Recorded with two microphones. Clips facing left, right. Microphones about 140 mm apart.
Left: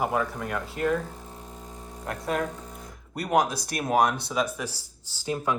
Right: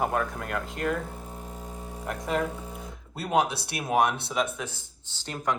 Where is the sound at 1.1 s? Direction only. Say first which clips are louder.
Right 2 dB; 5° right (ahead or behind).